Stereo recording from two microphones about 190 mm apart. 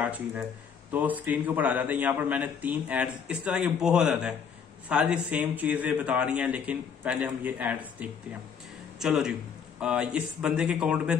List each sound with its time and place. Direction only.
0.0 s a man's voice: 10° right (ahead or behind)
9.0 s speech: 5° right (ahead or behind)